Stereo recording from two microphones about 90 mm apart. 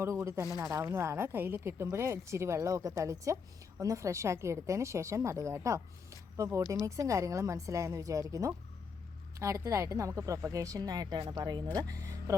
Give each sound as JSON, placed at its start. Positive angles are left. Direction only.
{"t": 0.0, "sound": "speech", "side_deg": -35}